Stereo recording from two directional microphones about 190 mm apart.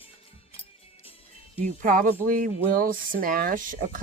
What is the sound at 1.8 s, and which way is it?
Speech, 45° right (ahead or behind).